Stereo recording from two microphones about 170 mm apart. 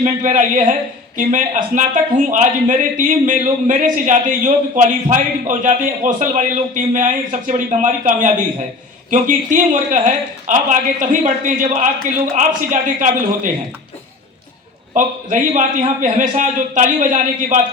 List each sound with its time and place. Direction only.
0.0 s speech: 45° right (ahead or behind)
14.9 s speech: 50° right (ahead or behind)